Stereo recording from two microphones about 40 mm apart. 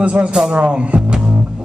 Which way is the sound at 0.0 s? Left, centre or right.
Right.